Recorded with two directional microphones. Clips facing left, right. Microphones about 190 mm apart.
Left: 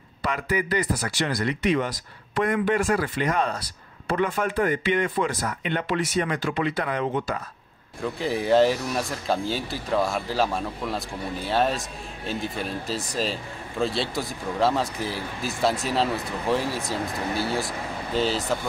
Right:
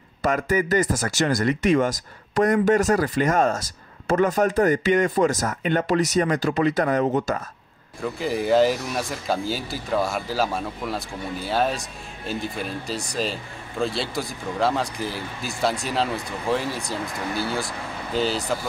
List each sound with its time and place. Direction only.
0.2 s speech: 45° right (ahead or behind)
8.0 s a man's voice: centre (ahead or behind)